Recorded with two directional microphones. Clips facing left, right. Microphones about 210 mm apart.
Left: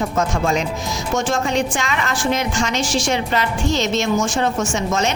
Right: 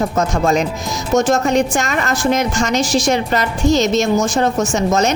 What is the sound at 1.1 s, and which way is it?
A woman's voice, 40° right (ahead or behind).